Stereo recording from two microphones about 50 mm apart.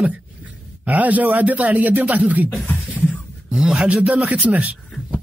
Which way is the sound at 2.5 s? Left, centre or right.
Left.